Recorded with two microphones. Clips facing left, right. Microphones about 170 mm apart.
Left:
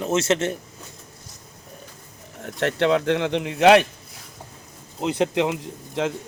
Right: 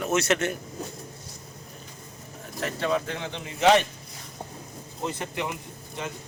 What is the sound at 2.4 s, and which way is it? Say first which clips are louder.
Speech: left 8 dB; 70° left (ahead or behind).